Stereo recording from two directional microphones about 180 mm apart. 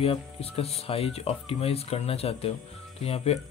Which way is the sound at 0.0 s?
35° left (ahead or behind).